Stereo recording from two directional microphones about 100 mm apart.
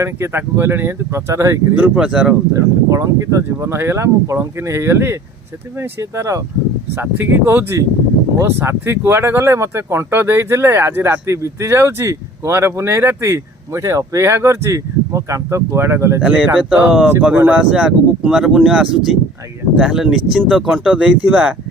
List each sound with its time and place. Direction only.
0.0 s speech: 25° right (ahead or behind)
1.7 s speech: 10° right (ahead or behind)
2.6 s speech: 30° right (ahead or behind)
6.9 s speech: 20° right (ahead or behind)
16.2 s speech: 10° right (ahead or behind)